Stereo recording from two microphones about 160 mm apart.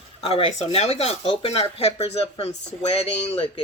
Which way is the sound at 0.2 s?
35° left (ahead or behind).